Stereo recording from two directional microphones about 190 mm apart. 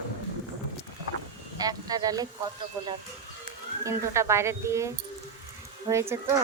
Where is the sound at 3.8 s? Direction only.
15° right (ahead or behind).